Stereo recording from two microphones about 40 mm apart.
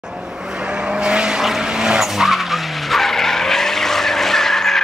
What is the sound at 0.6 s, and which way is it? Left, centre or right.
Vehicle, right.